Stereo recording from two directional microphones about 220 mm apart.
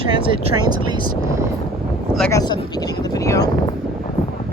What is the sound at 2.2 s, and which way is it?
Speech, 15° left (ahead or behind).